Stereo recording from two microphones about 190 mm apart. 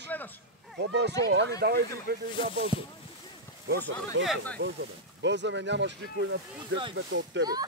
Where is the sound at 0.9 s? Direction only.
65° right (ahead or behind).